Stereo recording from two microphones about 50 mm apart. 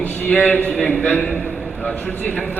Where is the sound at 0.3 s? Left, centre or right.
Left.